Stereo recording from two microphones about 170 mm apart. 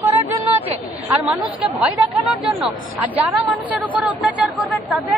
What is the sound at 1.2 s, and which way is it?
Speech, 5° right (ahead or behind).